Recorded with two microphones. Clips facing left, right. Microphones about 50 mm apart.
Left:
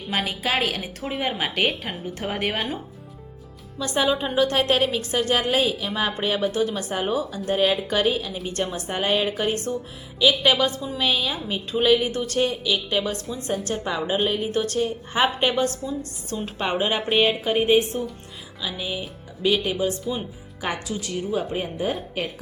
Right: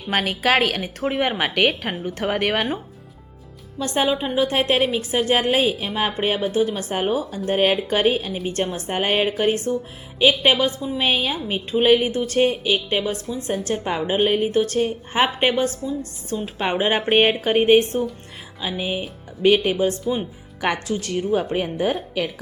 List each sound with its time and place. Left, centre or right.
0.1 s a woman's voice: right
3.8 s a woman's voice: right
4.4 s a woman's voice: centre
5.3 s a woman's voice: right
16.6 s speech: centre
17.1 s speech: right
18.6 s a woman's voice: right
19.4 s speech: right
19.7 s a woman's voice: right
20.6 s a woman's voice: right
20.8 s speech: right